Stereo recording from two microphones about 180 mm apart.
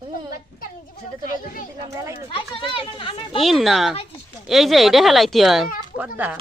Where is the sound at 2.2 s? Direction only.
30° left (ahead or behind).